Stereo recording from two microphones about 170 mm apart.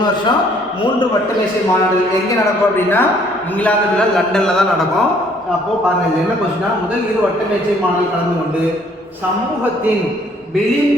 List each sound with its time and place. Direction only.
2.7 s a man's voice: 10° left (ahead or behind)
4.3 s a man's voice: 5° left (ahead or behind)